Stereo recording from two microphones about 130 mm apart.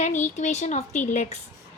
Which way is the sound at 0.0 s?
65° left (ahead or behind).